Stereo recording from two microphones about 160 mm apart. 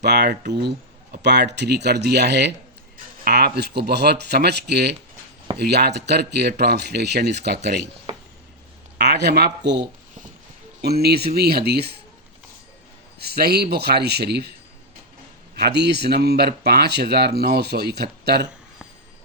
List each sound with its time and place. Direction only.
0.0 s speech: 90° right
9.0 s a man's voice: 90° right
13.1 s a man's voice: 75° right (ahead or behind)
15.5 s speech: 90° right